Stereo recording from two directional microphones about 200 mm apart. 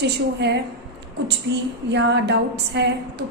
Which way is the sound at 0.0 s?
60° right (ahead or behind).